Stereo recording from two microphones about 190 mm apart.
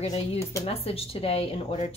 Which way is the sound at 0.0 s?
35° left (ahead or behind).